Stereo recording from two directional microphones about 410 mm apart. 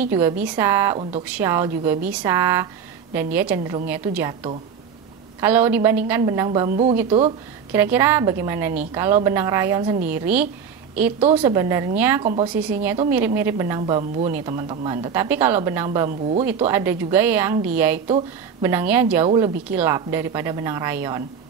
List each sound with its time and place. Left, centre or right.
0.0 s a woman's voice: centre
16.4 s a woman's voice: centre